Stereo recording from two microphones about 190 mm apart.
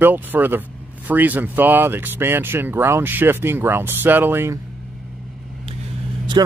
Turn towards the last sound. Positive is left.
turn(degrees=-20)  # may be behind; listen again after turning